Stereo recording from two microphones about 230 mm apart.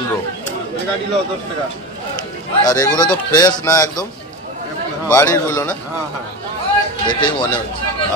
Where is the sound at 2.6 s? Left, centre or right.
Centre.